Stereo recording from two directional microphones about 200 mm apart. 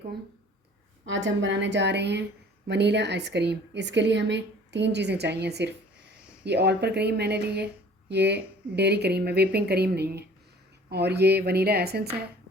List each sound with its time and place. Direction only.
1.0 s a woman's voice: 70° right (ahead or behind)